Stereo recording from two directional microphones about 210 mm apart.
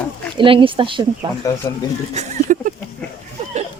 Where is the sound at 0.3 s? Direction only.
25° right (ahead or behind).